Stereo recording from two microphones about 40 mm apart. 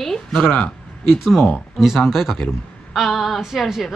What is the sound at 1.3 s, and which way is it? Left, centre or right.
Speech, left.